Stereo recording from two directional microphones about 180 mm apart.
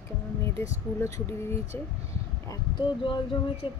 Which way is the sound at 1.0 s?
15° left (ahead or behind).